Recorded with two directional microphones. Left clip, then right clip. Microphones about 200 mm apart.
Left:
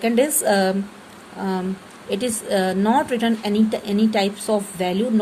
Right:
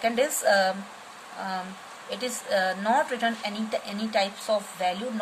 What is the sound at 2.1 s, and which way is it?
A woman's voice, 25° left (ahead or behind).